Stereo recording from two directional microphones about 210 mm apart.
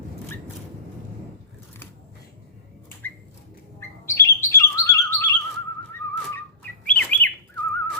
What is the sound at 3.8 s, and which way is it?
Bird, 10° left (ahead or behind).